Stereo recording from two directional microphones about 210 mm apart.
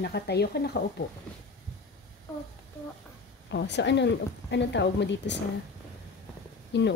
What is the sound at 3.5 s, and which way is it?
Speech, 55° left (ahead or behind).